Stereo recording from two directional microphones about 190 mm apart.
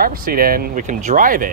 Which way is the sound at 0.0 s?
50° right (ahead or behind).